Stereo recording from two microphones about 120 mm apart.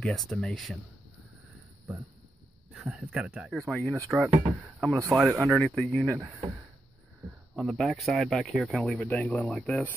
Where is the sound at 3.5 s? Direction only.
5° left (ahead or behind).